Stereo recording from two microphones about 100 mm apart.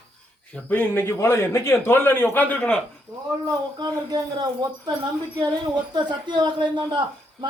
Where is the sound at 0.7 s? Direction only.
20° left (ahead or behind).